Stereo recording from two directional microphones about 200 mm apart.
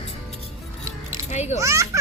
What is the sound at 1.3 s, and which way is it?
Speech, 35° left (ahead or behind).